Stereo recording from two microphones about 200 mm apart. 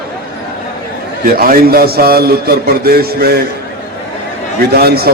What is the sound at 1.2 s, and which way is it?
A man's voice, 50° right (ahead or behind).